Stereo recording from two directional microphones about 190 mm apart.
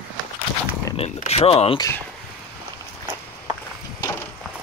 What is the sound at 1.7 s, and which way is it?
Speech, 15° left (ahead or behind).